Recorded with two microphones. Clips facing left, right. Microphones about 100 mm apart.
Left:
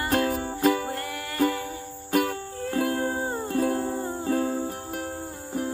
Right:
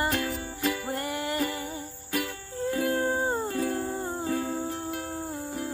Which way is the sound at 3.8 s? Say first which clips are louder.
Left 3 dB; 25° left (ahead or behind).